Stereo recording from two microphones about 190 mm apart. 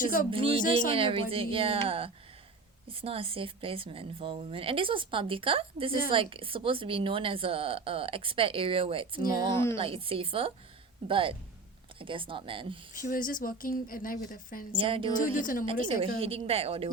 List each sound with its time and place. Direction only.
0.0 s speech: 45° left (ahead or behind)
0.3 s speech: 30° right (ahead or behind)
0.6 s speech: 45° left (ahead or behind)
0.9 s speech: 30° right (ahead or behind)
13.1 s speech: 45° left (ahead or behind)
14.8 s speech: 30° right (ahead or behind)
15.1 s speech: 45° left (ahead or behind)
15.9 s a woman's voice: 30° right (ahead or behind)